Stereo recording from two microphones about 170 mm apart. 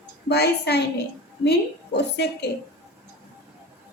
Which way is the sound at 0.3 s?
75° left (ahead or behind).